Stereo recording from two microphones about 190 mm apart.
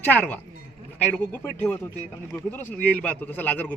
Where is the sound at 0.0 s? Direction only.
10° left (ahead or behind).